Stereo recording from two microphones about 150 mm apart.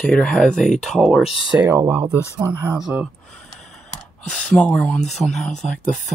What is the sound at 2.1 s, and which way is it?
Speech, 20° left (ahead or behind).